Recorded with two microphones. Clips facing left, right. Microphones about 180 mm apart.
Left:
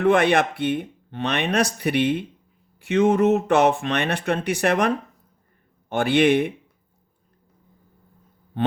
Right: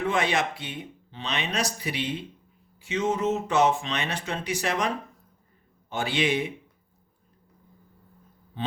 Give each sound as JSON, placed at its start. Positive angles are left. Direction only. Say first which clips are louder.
{"t": 0.0, "sound": "speech", "louder": "left 8 dB", "side_deg": 60}
{"t": 5.9, "sound": "speech", "louder": "left 8 dB", "side_deg": 60}
{"t": 8.6, "sound": "a sound", "louder": "left 10 dB", "side_deg": 60}